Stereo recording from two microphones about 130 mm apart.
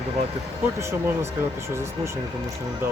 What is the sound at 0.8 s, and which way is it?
Speech, 20° right (ahead or behind).